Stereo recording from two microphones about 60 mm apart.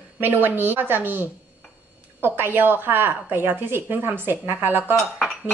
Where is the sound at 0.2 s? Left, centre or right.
Right.